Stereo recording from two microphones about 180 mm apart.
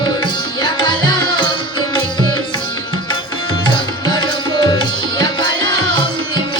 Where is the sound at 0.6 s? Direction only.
25° left (ahead or behind).